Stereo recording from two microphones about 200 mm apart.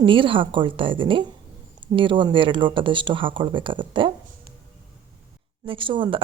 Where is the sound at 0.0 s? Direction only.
25° right (ahead or behind).